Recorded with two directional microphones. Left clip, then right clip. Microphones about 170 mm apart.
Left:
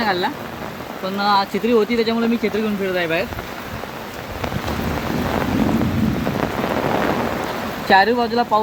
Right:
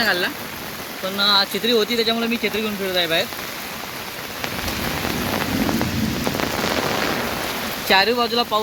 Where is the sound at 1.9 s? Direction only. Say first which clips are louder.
Left 1 dB; 50° right (ahead or behind).